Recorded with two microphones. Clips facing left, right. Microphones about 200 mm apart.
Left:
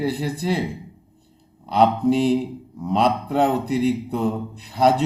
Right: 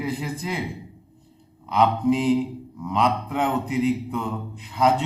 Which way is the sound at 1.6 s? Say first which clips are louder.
Left 2 dB; 35° left (ahead or behind).